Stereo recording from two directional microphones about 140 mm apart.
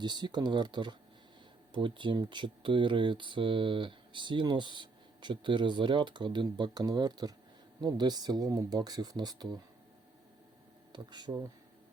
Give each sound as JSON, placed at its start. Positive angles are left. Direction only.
{"t": 0.0, "sound": "speech", "side_deg": -30}
{"t": 10.9, "sound": "speech", "side_deg": -30}